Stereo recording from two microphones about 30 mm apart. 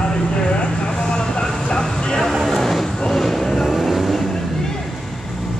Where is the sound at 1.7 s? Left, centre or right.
Left.